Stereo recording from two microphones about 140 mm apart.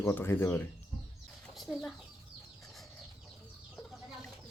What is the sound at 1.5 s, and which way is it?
Speech, centre (ahead or behind).